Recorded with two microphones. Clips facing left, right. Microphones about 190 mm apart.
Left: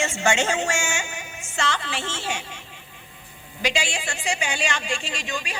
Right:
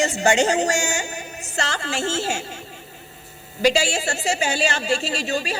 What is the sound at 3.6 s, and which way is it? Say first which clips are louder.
A woman's voice: right 7 dB; 40° right (ahead or behind).